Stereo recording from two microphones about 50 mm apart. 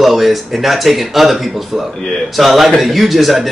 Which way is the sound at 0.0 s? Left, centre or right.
Centre.